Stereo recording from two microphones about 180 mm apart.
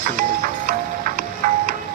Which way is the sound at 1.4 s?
50° right (ahead or behind).